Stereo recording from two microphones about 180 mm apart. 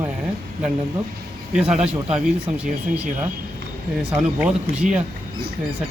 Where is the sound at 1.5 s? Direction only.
5° right (ahead or behind).